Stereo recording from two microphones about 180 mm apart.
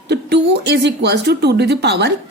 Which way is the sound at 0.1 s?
70° right (ahead or behind).